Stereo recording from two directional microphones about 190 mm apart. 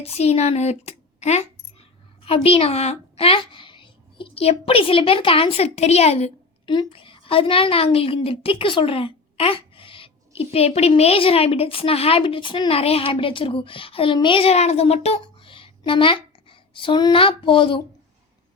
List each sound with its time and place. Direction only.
0.0 s speech: 35° left (ahead or behind)